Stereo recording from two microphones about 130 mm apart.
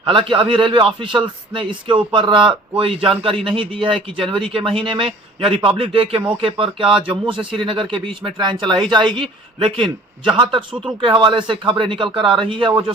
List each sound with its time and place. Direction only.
0.0 s a man's voice: 40° right (ahead or behind)